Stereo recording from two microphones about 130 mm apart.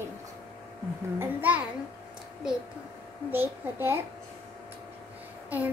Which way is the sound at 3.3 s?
15° right (ahead or behind).